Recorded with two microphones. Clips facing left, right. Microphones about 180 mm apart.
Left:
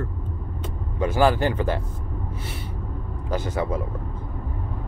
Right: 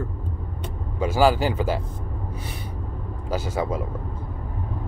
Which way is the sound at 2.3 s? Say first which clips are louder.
Even; 15° right (ahead or behind).